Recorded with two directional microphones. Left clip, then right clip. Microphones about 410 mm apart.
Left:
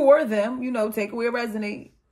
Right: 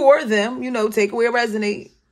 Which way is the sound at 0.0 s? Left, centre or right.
Right.